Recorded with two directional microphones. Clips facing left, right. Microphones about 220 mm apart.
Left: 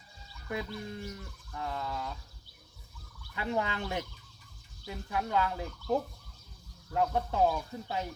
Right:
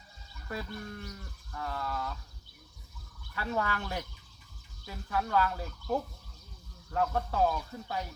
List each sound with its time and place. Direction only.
0.4 s speech: 20° left (ahead or behind)
3.3 s speech: 20° left (ahead or behind)